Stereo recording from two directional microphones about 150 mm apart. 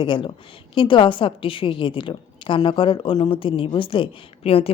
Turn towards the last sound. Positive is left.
turn(degrees=40)  # may be behind; listen again after turning